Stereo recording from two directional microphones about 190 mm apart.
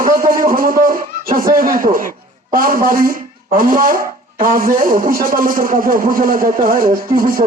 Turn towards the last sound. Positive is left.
turn(degrees=-50)  # may be behind; listen again after turning